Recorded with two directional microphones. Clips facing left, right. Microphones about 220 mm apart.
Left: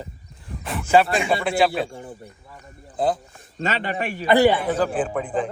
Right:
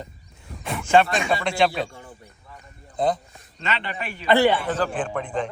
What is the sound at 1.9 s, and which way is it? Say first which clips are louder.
Speech: left 6 dB; 30° left (ahead or behind).